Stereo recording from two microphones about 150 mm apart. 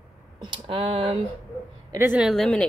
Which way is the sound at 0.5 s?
35° right (ahead or behind).